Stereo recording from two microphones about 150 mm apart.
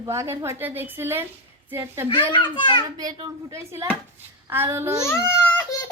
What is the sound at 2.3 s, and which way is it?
Speech, 30° left (ahead or behind).